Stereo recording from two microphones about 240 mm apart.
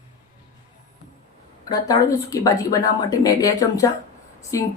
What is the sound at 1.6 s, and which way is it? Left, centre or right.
A woman's voice, centre.